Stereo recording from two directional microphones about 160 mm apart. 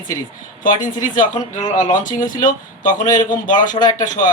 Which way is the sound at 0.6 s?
55° left (ahead or behind).